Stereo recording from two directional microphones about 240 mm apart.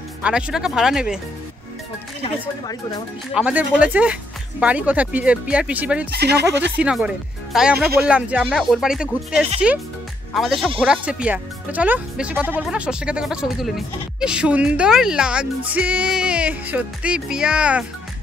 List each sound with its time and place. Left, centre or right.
0.2 s speech: centre
2.4 s speech: centre
3.3 s speech: centre
6.1 s speech: right
6.8 s speech: centre